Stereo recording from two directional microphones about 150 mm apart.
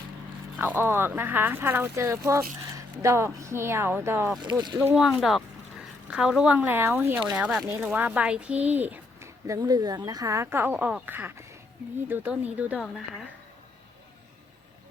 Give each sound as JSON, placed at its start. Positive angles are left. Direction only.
{"t": 0.6, "sound": "speech", "side_deg": -15}
{"t": 4.9, "sound": "speech", "side_deg": 0}